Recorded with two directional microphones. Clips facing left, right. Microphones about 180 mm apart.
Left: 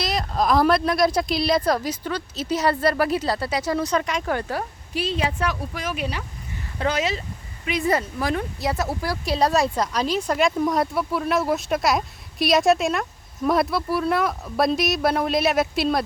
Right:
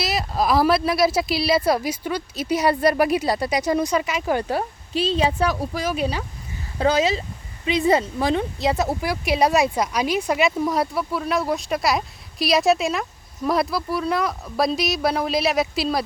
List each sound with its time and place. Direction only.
0.0 s speech: 5° right (ahead or behind)
4.4 s a woman's voice: 20° right (ahead or behind); by 16.0 s centre (ahead or behind)